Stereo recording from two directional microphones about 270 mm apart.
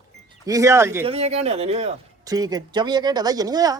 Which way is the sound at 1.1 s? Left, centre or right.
Right.